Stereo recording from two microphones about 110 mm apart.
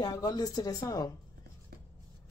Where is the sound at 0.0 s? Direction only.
35° left (ahead or behind).